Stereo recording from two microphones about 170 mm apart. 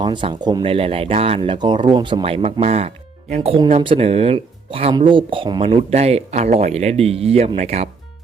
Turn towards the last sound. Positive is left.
turn(degrees=-40)  # may be behind; listen again after turning